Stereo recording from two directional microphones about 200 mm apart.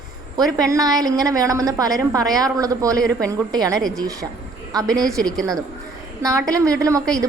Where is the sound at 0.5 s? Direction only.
15° right (ahead or behind).